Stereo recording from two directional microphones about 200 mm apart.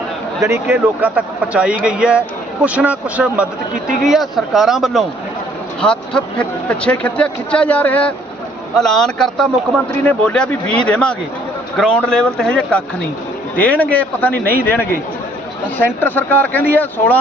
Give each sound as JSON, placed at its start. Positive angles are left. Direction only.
{"t": 0.4, "sound": "speech", "side_deg": -10}